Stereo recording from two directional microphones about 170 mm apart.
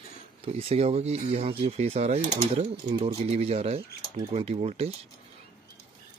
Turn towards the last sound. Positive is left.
turn(degrees=-35)  # may be behind; listen again after turning